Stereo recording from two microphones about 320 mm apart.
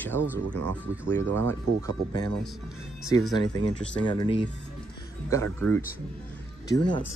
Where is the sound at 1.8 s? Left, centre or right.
Centre.